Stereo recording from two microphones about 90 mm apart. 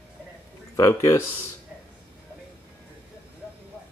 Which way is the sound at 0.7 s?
35° left (ahead or behind).